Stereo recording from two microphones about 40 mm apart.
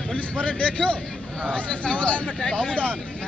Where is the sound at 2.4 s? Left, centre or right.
Centre.